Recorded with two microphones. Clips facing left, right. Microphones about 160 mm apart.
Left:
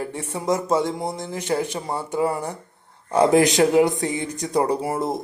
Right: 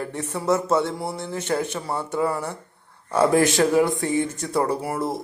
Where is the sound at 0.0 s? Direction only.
10° left (ahead or behind).